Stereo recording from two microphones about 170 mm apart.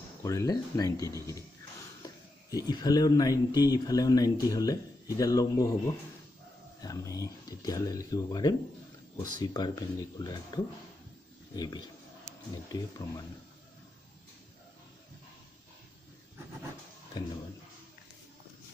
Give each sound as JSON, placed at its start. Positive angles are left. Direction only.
{"t": 0.2, "sound": "speech", "side_deg": 20}